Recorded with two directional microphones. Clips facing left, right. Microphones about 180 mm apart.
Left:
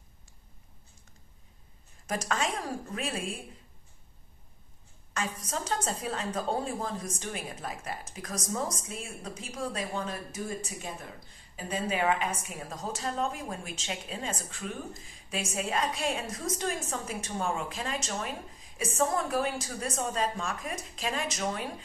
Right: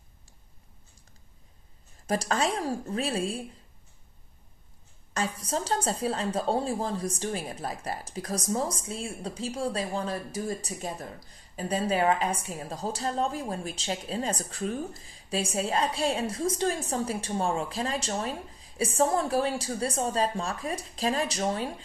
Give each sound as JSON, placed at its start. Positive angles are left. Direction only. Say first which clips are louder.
{"t": 2.0, "sound": "a woman's voice", "louder": "right 4 dB", "side_deg": -35}
{"t": 5.1, "sound": "a woman's voice", "louder": "right 4 dB", "side_deg": -35}